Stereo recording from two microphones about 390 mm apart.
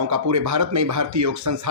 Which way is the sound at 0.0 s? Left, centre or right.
Right.